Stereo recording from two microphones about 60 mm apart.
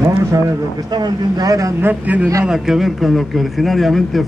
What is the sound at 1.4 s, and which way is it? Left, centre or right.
Speech, right.